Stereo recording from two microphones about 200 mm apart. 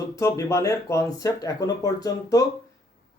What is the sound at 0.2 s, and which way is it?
Speech, 15° left (ahead or behind).